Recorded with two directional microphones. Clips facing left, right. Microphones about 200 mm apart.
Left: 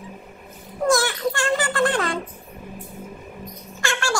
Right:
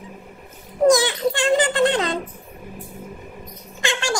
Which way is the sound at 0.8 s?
20° right (ahead or behind).